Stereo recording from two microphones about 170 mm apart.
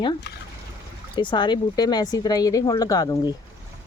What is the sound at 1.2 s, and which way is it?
Speech, 25° left (ahead or behind).